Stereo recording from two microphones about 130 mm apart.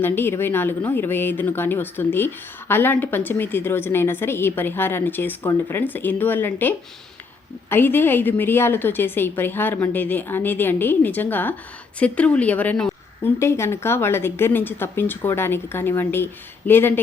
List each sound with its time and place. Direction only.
0.0 s a woman's voice: 15° left (ahead or behind)
13.4 s a woman's voice: 20° left (ahead or behind)